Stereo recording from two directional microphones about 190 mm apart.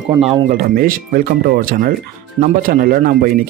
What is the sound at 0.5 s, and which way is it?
Speech, 50° right (ahead or behind).